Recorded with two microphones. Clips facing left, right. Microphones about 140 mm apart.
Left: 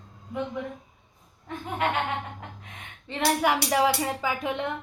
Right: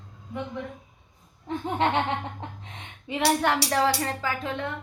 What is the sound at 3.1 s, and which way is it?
Speech, 5° right (ahead or behind).